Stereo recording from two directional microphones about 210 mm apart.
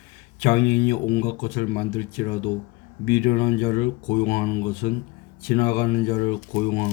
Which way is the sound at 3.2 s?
45° left (ahead or behind).